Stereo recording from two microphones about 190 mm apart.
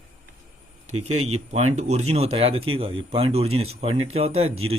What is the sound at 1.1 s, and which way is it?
Speech, 35° right (ahead or behind).